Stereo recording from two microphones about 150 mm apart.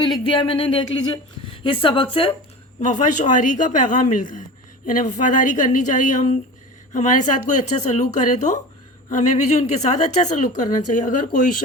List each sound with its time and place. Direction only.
0.0 s speech: 35° left (ahead or behind)
2.8 s a woman's voice: 55° left (ahead or behind)